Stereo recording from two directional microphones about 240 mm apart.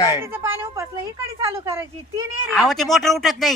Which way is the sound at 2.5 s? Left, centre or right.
Centre.